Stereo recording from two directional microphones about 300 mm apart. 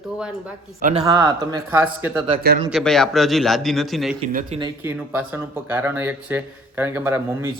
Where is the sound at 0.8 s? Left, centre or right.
Right.